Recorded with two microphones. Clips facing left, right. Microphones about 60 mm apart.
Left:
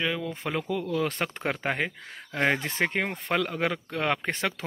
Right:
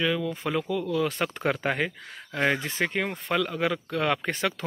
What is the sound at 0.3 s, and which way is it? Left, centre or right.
Speech, left.